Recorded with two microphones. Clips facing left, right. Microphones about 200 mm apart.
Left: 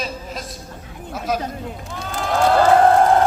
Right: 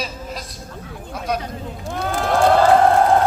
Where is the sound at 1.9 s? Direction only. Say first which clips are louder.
Right 6 dB; 60° right (ahead or behind).